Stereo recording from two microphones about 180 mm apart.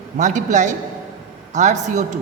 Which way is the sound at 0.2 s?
40° right (ahead or behind).